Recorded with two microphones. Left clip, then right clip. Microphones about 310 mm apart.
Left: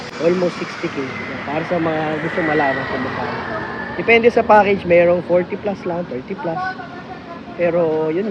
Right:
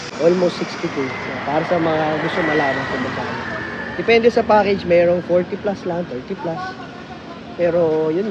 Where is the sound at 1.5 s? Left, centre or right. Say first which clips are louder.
Right 2 dB; right; by 5.7 s centre.